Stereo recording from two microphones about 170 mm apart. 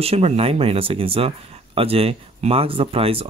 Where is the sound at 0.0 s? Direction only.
35° right (ahead or behind).